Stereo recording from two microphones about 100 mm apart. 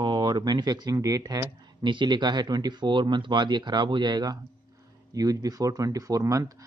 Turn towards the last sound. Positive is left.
turn(degrees=-35)  # may be behind; listen again after turning